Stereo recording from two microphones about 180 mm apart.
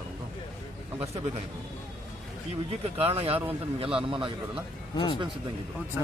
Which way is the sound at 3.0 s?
35° right (ahead or behind).